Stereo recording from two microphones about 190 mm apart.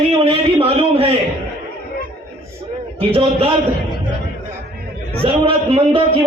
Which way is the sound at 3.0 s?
30° right (ahead or behind).